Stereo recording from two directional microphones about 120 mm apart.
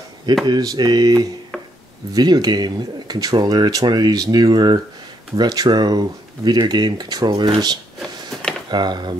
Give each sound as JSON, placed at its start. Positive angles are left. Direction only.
{"t": 0.5, "sound": "speech", "side_deg": -35}